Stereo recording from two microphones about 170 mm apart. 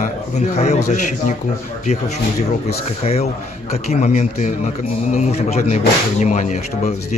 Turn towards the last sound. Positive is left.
turn(degrees=45)  # may be behind; listen again after turning